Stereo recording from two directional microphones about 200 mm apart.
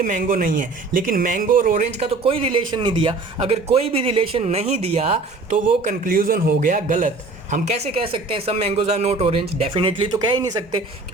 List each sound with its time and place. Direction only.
0.0 s speech: 45° right (ahead or behind)
2.0 s speech: 30° right (ahead or behind)
7.5 s speech: 30° right (ahead or behind)